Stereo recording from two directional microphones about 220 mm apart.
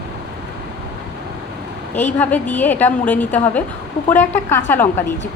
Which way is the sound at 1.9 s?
10° left (ahead or behind).